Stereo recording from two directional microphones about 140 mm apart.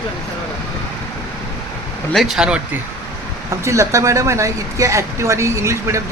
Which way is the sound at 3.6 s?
20° right (ahead or behind).